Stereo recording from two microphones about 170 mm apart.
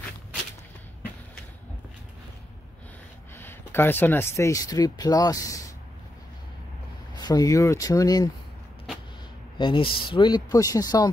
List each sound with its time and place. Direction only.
3.3 s speech: 10° left (ahead or behind)
7.2 s speech: 25° left (ahead or behind)
9.6 s speech: 30° left (ahead or behind)